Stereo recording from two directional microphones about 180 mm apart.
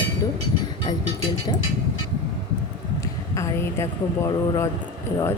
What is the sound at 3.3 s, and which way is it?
Speech, 15° left (ahead or behind).